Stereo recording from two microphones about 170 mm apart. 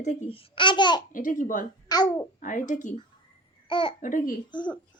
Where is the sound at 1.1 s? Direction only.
50° left (ahead or behind).